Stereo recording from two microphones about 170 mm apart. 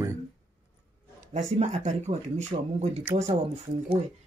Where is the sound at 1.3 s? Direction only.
40° right (ahead or behind).